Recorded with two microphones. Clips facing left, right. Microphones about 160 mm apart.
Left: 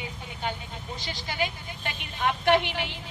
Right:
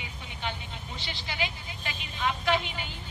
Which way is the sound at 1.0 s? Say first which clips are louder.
Left 4 dB; 45° left (ahead or behind).